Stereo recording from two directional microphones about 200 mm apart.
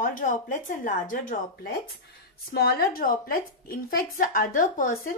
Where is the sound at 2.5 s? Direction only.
50° left (ahead or behind).